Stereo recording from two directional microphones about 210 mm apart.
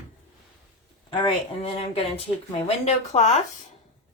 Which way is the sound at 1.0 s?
25° left (ahead or behind).